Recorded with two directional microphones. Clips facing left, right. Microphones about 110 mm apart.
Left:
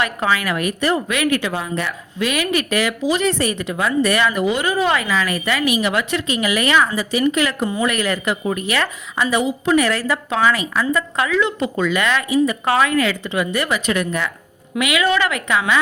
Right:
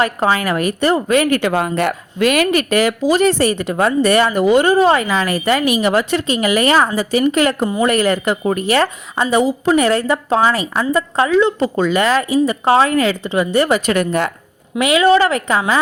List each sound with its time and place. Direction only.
0.0 s speech: 35° right (ahead or behind)
1.4 s speech: 60° right (ahead or behind)
4.0 s speech: 35° right (ahead or behind)
14.8 s speech: 35° right (ahead or behind)